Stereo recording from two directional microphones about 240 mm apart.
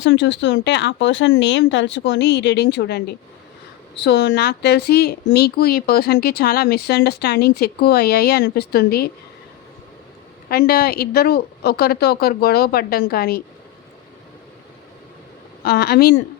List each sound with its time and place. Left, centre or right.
0.0 s speech: left
10.5 s speech: left
15.6 s speech: left